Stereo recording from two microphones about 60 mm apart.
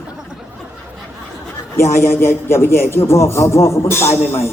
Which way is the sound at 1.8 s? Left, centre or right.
Left.